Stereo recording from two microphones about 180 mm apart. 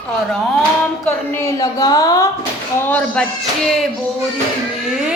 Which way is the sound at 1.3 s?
15° left (ahead or behind).